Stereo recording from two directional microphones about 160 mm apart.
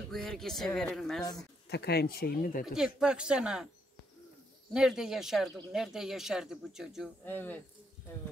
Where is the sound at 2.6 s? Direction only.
5° right (ahead or behind).